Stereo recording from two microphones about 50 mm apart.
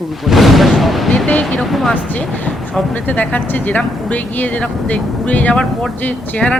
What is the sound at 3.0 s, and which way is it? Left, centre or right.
Speech, left.